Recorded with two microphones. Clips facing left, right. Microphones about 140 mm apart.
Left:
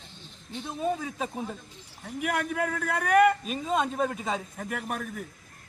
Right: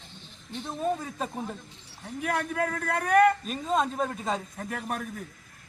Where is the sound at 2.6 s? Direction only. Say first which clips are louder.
Even; 10° left (ahead or behind).